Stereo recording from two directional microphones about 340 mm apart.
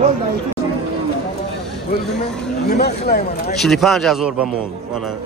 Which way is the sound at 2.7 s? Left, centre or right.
Left.